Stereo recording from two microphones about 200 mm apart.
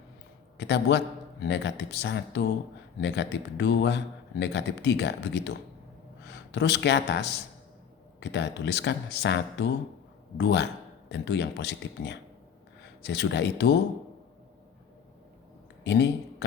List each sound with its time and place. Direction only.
0.5 s a man's voice: 60° left (ahead or behind)
15.8 s speech: 60° left (ahead or behind)